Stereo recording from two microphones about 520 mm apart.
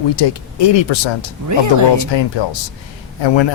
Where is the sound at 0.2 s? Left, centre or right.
Left.